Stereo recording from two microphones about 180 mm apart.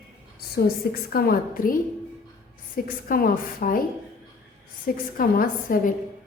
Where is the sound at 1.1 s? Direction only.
55° left (ahead or behind).